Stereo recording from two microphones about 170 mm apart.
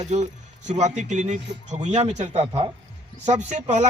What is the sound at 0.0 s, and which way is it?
Speech, 45° right (ahead or behind).